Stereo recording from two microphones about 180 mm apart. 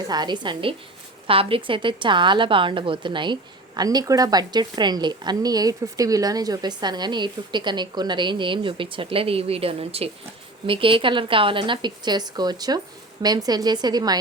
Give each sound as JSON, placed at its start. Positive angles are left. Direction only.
{"t": 0.1, "sound": "speech", "side_deg": -25}